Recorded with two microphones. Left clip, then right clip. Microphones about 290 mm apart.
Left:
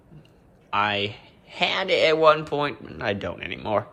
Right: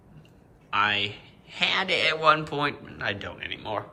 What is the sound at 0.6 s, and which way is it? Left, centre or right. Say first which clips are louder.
A man's voice: left 1 dB; centre.